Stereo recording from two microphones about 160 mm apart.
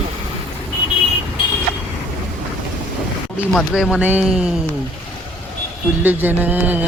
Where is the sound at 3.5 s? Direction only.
Centre (ahead or behind).